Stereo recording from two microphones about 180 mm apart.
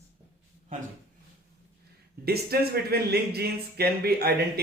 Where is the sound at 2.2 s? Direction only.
60° right (ahead or behind).